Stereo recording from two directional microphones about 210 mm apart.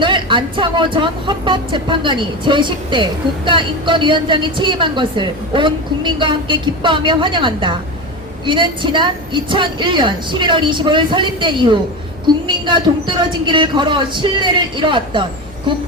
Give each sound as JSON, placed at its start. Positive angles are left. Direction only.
{"t": 0.0, "sound": "speech", "side_deg": -20}